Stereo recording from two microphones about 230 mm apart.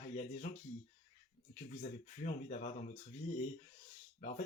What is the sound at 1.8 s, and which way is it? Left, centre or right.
Speech, left.